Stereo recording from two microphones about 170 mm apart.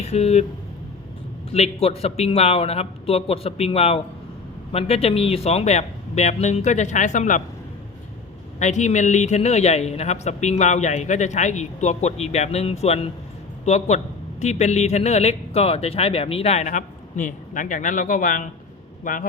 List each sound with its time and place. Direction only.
0.0 s speech: 40° left (ahead or behind)
1.5 s speech: 35° left (ahead or behind)
8.5 s a man's voice: 45° left (ahead or behind)